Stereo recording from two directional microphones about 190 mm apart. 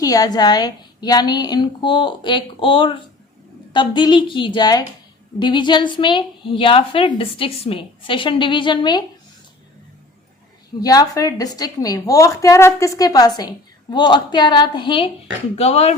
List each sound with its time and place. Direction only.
0.0 s a woman's voice: 20° left (ahead or behind)
10.8 s a woman's voice: 20° left (ahead or behind)